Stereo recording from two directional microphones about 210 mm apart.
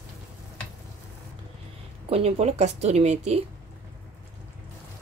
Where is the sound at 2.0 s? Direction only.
30° right (ahead or behind).